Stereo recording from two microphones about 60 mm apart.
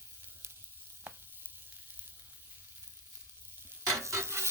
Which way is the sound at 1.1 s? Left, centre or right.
Right.